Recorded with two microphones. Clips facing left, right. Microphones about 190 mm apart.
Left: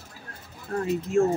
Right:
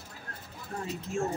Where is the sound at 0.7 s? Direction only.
60° left (ahead or behind).